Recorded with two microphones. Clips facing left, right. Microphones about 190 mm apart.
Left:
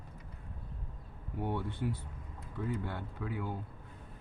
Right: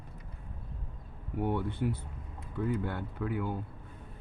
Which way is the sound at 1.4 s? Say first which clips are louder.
Right 4 dB; 55° right (ahead or behind).